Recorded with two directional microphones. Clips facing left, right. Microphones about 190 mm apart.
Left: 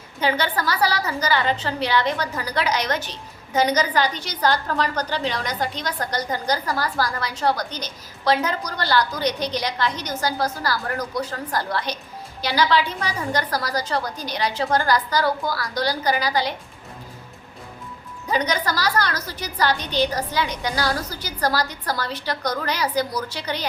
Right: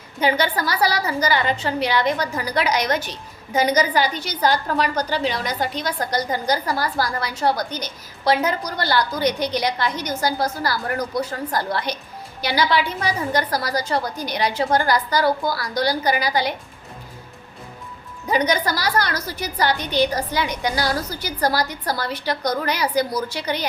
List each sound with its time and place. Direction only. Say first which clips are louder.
0.2 s a woman's voice: right 2 dB; 15° right (ahead or behind)
18.3 s a woman's voice: right 3 dB; 10° right (ahead or behind)